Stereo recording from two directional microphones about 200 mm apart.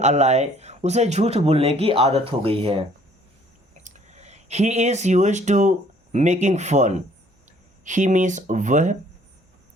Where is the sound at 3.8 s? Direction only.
35° right (ahead or behind).